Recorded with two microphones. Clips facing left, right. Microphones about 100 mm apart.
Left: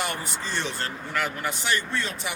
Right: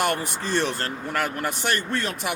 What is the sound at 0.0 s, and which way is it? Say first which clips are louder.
Speech: right 6 dB; 55° right (ahead or behind).